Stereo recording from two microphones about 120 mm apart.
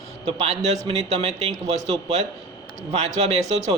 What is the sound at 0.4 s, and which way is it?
Speech, 60° right (ahead or behind).